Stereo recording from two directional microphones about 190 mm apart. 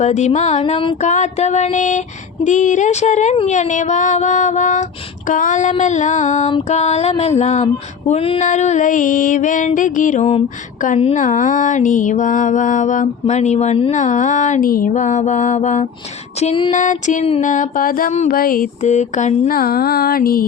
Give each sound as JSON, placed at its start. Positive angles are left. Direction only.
{"t": 0.0, "sound": "mantra", "side_deg": 35}
{"t": 16.4, "sound": "a sound", "side_deg": 30}
{"t": 16.7, "sound": "music", "side_deg": 40}